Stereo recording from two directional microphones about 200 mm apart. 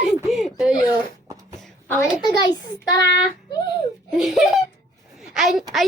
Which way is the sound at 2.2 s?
20° left (ahead or behind).